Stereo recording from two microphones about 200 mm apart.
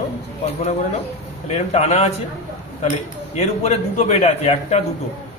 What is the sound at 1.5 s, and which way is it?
Speech, 30° left (ahead or behind).